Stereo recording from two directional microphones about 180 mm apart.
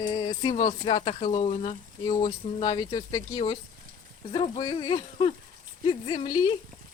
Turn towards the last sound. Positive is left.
turn(degrees=25)  # may be behind; listen again after turning